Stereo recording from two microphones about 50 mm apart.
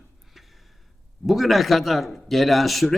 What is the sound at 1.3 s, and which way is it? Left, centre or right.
A man's voice, centre.